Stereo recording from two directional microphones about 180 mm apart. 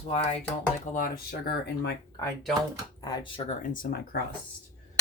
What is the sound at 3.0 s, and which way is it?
Speech, 20° left (ahead or behind).